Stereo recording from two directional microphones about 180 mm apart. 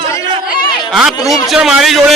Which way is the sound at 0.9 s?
Centre (ahead or behind).